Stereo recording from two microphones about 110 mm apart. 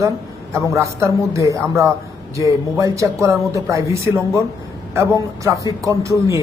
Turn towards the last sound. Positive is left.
turn(degrees=-30)  # may be behind; listen again after turning